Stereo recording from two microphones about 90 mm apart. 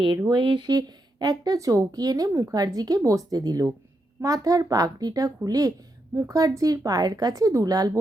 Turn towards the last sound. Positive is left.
turn(degrees=-45)  # may be behind; listen again after turning